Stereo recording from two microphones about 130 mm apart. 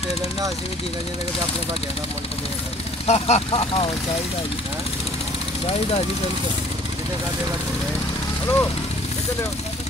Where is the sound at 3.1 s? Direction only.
55° left (ahead or behind).